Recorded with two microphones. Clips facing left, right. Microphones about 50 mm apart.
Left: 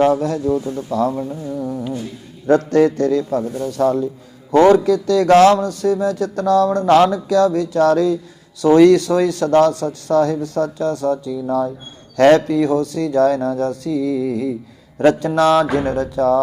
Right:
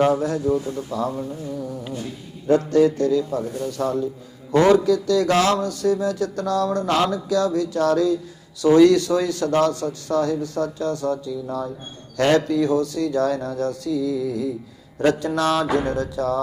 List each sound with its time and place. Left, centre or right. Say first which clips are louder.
0.0 s a man's voice: left 3 dB; left
2.5 s a man's voice: left 3 dB; left